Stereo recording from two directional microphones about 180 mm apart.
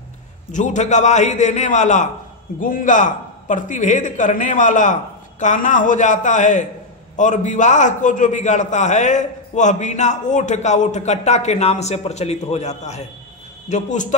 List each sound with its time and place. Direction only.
0.5 s a man's voice: 45° left (ahead or behind)